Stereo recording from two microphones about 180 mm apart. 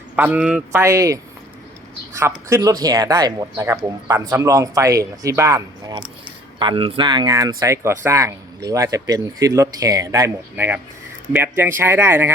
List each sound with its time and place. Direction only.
0.2 s speech: 5° right (ahead or behind)